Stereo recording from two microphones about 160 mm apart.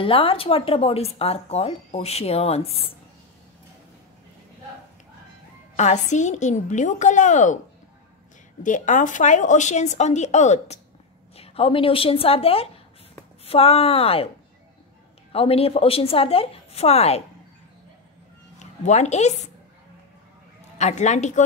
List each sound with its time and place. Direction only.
0.0 s speech: 35° left (ahead or behind)
5.8 s speech: 45° left (ahead or behind)
8.6 s speech: 50° left (ahead or behind)
15.3 s speech: 35° left (ahead or behind)
18.6 s speech: 45° left (ahead or behind)
20.7 s speech: 45° left (ahead or behind)